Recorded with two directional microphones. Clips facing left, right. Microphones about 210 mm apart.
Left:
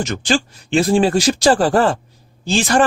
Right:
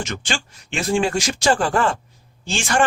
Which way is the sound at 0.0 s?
35° left (ahead or behind).